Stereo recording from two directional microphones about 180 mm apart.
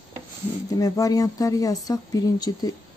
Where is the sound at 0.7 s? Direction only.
20° left (ahead or behind).